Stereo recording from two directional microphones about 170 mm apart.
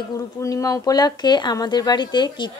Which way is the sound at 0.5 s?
20° left (ahead or behind).